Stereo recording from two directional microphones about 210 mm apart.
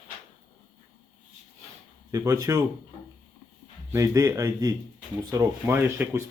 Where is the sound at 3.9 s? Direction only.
15° right (ahead or behind).